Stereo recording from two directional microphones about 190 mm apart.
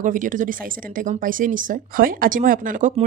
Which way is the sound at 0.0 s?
45° right (ahead or behind).